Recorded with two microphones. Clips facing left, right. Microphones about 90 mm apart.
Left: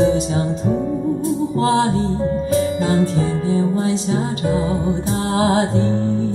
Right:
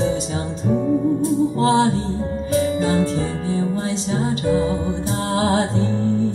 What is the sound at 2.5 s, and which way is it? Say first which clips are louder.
Music: right 1 dB; 45° left (ahead or behind).